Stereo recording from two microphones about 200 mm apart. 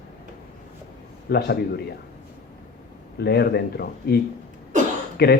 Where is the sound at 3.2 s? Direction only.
55° left (ahead or behind).